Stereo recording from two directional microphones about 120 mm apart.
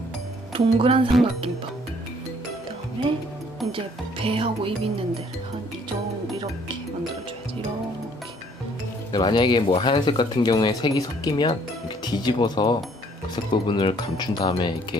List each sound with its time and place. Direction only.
0.5 s speech: 50° right (ahead or behind)
3.7 s speech: 50° right (ahead or behind)
9.1 s speech: 40° left (ahead or behind)